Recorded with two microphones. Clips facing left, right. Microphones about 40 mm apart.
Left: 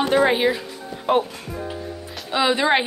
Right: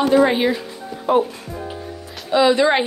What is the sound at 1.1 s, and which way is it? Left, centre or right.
Speech, left.